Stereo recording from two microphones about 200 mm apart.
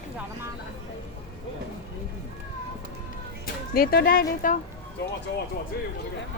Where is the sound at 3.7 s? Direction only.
50° left (ahead or behind).